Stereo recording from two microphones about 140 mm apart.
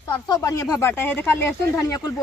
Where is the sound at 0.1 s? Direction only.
25° left (ahead or behind).